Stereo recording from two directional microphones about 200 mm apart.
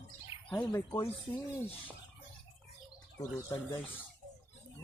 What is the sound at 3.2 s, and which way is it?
Speech, 20° left (ahead or behind).